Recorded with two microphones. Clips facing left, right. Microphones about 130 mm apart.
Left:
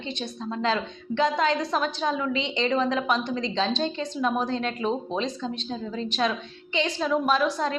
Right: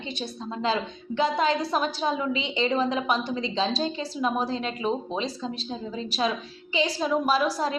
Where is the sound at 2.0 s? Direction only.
25° right (ahead or behind).